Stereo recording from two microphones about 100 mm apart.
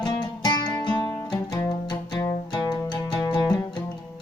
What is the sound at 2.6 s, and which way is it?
Music, 50° left (ahead or behind).